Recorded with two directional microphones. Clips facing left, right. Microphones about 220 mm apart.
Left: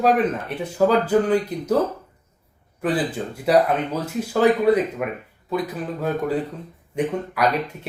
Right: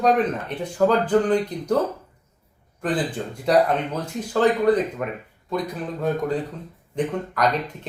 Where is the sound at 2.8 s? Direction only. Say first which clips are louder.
Left 2 dB; 5° left (ahead or behind).